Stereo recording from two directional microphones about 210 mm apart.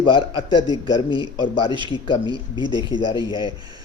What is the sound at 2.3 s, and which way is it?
Speech, 20° right (ahead or behind).